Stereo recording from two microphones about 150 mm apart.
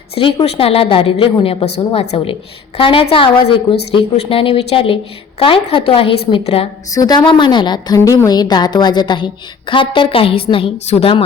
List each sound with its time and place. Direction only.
0.1 s a woman's voice: 35° left (ahead or behind)
6.9 s a woman's voice: 25° left (ahead or behind)